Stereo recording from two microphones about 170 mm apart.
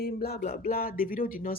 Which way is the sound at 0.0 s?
65° left (ahead or behind).